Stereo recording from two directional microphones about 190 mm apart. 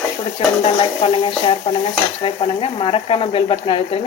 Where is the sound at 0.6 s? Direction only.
30° left (ahead or behind).